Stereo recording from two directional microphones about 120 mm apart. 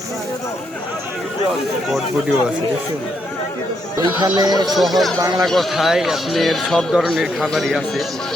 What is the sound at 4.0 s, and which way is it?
Speech, 35° right (ahead or behind).